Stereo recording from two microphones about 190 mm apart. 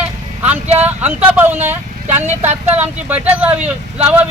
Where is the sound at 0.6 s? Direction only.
35° right (ahead or behind).